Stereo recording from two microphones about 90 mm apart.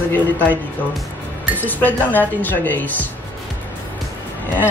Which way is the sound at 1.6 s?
20° left (ahead or behind).